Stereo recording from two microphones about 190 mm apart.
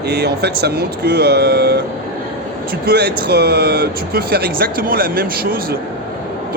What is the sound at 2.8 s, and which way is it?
Speech, 55° right (ahead or behind).